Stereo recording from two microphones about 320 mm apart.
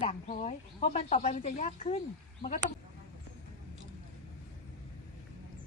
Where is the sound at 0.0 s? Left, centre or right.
Left.